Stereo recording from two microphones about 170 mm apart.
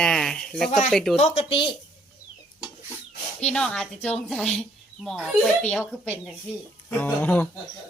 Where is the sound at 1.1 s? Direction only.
40° left (ahead or behind).